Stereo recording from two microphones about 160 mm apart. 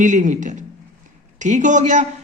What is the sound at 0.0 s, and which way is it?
A man's voice, 50° right (ahead or behind).